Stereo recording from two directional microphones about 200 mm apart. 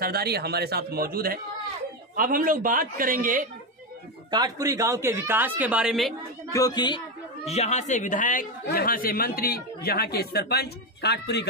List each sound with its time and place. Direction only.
0.0 s speech: 50° right (ahead or behind)
4.3 s speech: 20° right (ahead or behind); by 6.1 s centre (ahead or behind)
6.5 s speech: 20° left (ahead or behind)
7.4 s a man's voice: 35° left (ahead or behind); by 11.4 s 60° left (ahead or behind)